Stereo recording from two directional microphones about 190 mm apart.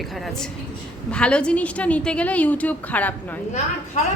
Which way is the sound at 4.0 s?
40° left (ahead or behind).